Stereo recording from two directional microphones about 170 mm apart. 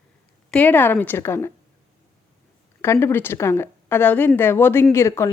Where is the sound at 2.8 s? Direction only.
15° left (ahead or behind).